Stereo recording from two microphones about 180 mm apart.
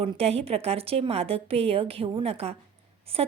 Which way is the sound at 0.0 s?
30° right (ahead or behind).